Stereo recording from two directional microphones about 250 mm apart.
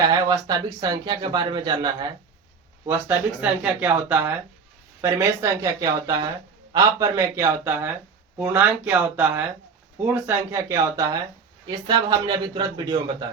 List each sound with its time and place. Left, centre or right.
0.3 s speech: centre